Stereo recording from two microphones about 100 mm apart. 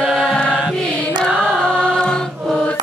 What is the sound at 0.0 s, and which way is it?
Music, 10° right (ahead or behind).